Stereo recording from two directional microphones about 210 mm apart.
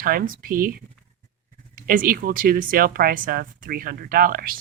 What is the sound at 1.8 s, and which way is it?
Speech, 40° right (ahead or behind).